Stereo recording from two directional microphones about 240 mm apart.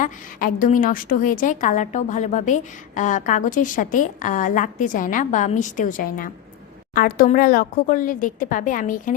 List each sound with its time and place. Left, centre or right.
0.0 s a woman's voice: left